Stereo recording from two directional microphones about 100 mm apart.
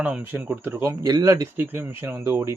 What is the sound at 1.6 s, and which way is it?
Speech, 20° right (ahead or behind).